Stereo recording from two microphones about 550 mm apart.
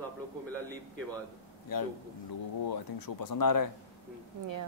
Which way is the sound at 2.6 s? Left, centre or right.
Left.